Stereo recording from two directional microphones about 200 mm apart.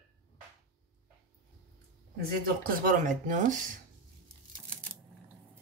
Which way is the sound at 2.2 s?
45° right (ahead or behind).